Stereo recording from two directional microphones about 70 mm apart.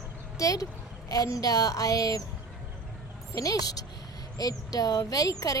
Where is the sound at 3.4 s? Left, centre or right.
Left.